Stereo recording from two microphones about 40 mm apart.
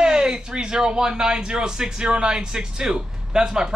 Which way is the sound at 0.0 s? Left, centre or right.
Centre.